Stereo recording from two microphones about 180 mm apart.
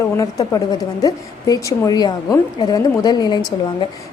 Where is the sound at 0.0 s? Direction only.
20° left (ahead or behind).